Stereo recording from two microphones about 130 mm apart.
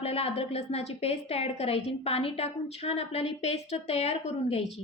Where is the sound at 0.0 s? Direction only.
50° left (ahead or behind).